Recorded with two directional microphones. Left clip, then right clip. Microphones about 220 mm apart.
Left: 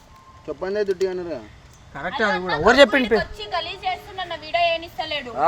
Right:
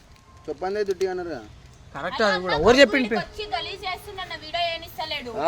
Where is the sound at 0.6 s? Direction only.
10° left (ahead or behind).